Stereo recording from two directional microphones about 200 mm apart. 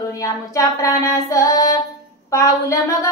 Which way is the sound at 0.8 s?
15° left (ahead or behind).